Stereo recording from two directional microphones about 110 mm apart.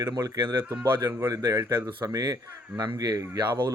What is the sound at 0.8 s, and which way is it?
A man's voice, 20° right (ahead or behind).